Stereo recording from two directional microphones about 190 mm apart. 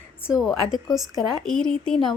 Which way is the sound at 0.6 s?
20° left (ahead or behind).